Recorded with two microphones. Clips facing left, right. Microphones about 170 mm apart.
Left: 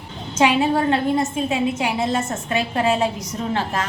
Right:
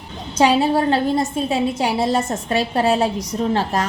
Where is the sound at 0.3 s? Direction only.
35° right (ahead or behind).